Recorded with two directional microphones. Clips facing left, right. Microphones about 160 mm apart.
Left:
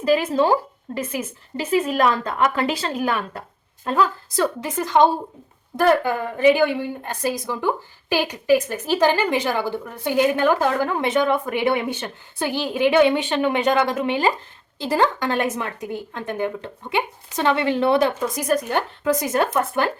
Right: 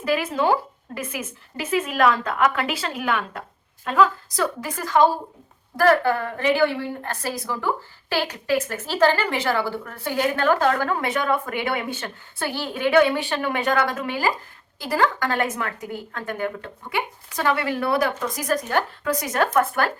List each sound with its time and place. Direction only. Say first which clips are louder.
0.0 s a woman's voice: left 4 dB; 30° left (ahead or behind)